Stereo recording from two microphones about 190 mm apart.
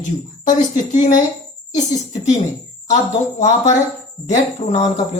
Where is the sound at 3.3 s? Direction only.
40° left (ahead or behind).